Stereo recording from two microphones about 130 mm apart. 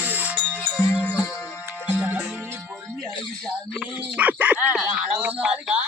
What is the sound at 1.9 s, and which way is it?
Music, 15° right (ahead or behind).